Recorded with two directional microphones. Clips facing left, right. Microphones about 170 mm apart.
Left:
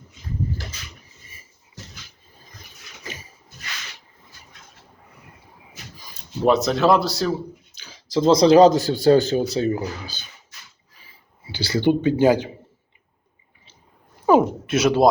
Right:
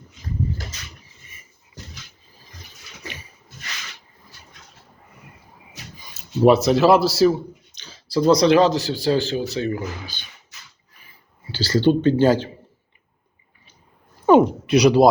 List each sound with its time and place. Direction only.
6.0 s speech: centre (ahead or behind)
7.8 s speech: 15° left (ahead or behind); by 9.9 s 35° left (ahead or behind)
11.5 s speech: 15° left (ahead or behind)
14.3 s speech: 5° left (ahead or behind)